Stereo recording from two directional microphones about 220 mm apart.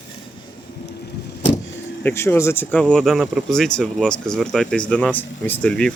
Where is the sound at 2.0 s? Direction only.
10° left (ahead or behind).